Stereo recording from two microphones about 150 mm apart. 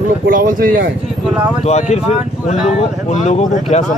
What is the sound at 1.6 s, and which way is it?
Speech, 45° left (ahead or behind).